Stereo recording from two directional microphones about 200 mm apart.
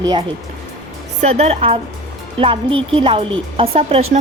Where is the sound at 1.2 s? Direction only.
30° right (ahead or behind).